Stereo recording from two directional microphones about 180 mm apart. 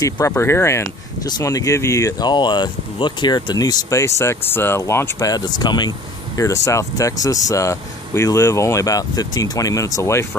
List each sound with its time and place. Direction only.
0.3 s speech: 15° left (ahead or behind)